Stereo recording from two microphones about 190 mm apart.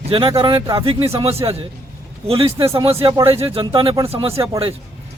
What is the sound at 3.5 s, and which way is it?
Speech, 25° right (ahead or behind).